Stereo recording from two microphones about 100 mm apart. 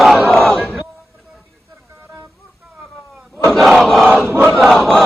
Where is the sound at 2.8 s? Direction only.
5° right (ahead or behind).